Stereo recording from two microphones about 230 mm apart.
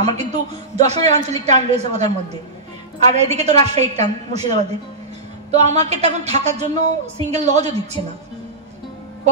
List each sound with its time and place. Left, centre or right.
0.0 s a woman's voice: right
3.2 s a woman's voice: right